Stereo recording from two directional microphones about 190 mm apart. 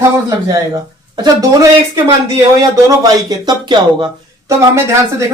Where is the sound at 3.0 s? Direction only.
20° right (ahead or behind).